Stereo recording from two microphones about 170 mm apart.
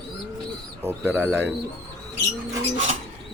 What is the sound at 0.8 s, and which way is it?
Speech, 10° right (ahead or behind).